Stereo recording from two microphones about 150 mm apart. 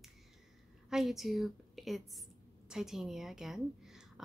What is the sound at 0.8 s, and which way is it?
A woman's voice, centre (ahead or behind).